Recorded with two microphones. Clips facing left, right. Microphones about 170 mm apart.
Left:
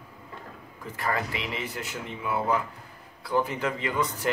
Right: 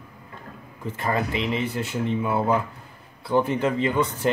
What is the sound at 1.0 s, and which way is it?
Speech, 25° right (ahead or behind).